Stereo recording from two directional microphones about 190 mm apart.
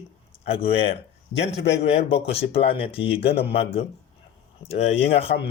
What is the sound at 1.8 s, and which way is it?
Speech, 30° left (ahead or behind).